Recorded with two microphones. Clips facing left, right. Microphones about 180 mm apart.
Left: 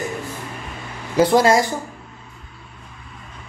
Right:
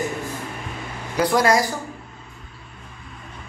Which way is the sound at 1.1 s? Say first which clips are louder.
Left 4 dB; 25° left (ahead or behind).